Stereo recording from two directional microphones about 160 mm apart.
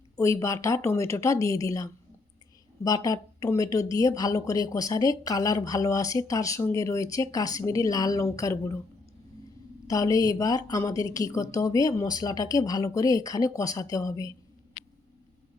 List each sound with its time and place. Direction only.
0.2 s speech: 20° left (ahead or behind)
9.8 s speech: 20° left (ahead or behind)